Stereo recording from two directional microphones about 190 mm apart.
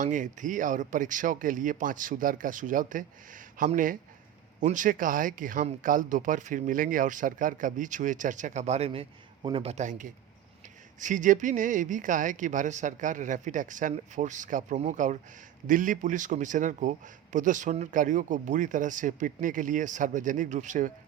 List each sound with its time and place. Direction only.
0.0 s speech: 40° right (ahead or behind)